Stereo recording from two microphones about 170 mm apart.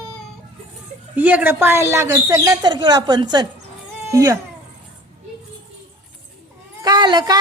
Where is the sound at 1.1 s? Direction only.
10° right (ahead or behind).